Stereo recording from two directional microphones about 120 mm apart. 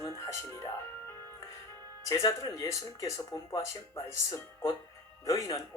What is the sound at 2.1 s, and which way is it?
Speech, 30° left (ahead or behind).